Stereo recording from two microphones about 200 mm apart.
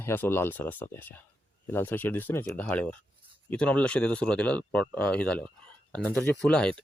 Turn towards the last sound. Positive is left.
turn(degrees=5)  # may be behind; listen again after turning